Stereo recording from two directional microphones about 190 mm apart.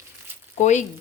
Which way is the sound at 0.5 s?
40° left (ahead or behind).